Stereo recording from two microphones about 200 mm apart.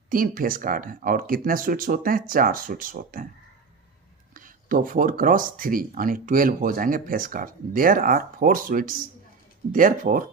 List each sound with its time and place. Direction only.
0.1 s speech: 45° right (ahead or behind)
4.4 s speech: 40° right (ahead or behind)